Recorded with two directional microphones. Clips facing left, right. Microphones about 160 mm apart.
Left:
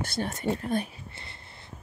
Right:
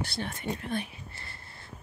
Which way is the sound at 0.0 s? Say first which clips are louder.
Left 5 dB; 45° left (ahead or behind).